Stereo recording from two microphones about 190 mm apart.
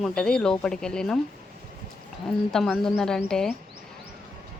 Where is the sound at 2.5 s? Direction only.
Centre (ahead or behind).